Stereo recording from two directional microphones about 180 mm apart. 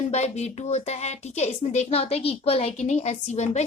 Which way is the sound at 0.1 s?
40° left (ahead or behind).